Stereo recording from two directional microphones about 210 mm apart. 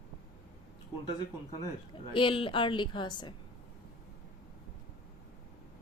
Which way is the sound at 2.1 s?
25° left (ahead or behind).